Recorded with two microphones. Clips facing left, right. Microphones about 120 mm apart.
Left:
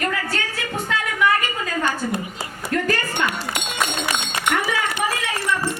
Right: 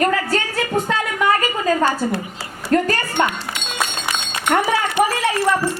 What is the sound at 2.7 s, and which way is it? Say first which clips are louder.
Speech: right 7 dB; 40° right (ahead or behind).